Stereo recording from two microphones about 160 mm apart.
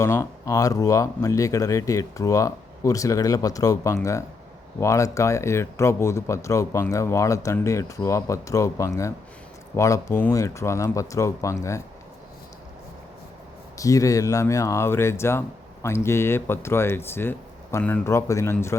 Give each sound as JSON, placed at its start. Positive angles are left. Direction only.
{"t": 0.0, "sound": "speech", "side_deg": 15}
{"t": 13.7, "sound": "speech", "side_deg": 20}